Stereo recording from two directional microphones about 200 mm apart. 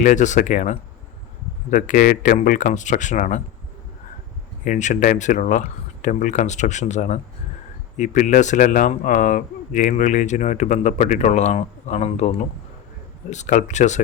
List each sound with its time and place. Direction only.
0.0 s speech: 40° left (ahead or behind)
4.6 s speech: 40° left (ahead or behind)